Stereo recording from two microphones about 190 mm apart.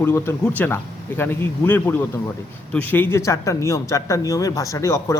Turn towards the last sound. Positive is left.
turn(degrees=15)  # may be behind; listen again after turning